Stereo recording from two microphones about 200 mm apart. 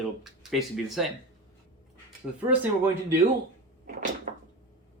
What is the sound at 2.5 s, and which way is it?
Speech, 10° right (ahead or behind).